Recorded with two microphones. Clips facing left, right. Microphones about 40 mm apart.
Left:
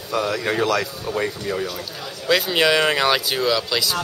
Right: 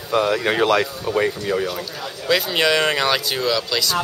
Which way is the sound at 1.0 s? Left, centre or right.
Centre.